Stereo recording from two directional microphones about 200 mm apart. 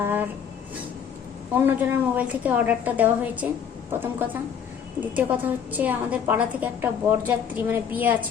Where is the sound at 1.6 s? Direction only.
10° right (ahead or behind).